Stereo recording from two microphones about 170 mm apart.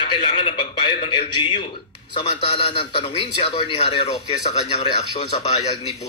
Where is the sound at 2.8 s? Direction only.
30° left (ahead or behind).